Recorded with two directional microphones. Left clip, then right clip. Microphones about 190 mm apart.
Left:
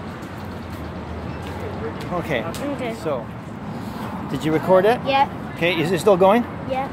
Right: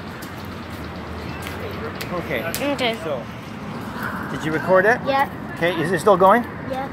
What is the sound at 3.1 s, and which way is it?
Speech, 40° left (ahead or behind).